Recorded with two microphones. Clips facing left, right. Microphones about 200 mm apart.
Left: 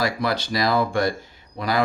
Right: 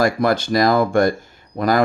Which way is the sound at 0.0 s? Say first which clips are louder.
Right 6 dB; 50° right (ahead or behind).